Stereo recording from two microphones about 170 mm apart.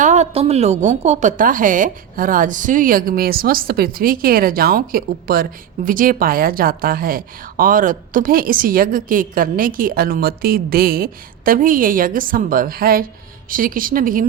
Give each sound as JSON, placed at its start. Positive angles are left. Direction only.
{"t": 0.0, "sound": "a woman's voice", "side_deg": -40}